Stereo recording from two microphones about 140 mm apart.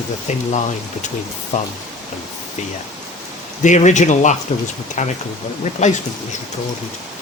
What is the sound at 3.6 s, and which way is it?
Speech, 60° left (ahead or behind).